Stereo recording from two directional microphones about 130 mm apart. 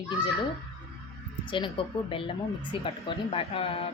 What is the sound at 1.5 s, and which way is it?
A woman's voice, 40° left (ahead or behind).